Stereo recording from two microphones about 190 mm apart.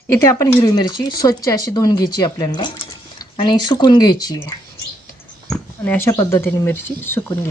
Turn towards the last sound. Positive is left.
turn(degrees=10)  # may be behind; listen again after turning